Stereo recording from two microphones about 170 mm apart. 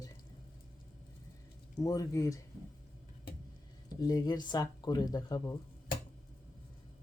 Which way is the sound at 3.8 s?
25° left (ahead or behind).